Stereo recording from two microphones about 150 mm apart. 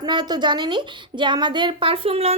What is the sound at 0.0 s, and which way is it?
A woman's voice, 30° right (ahead or behind).